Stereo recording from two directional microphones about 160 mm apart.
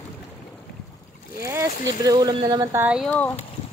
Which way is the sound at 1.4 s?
15° right (ahead or behind).